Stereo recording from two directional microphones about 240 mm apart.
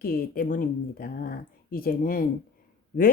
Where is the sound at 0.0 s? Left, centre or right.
Left.